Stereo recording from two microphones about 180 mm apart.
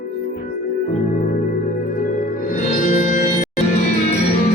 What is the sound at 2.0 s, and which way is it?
Music, 50° left (ahead or behind).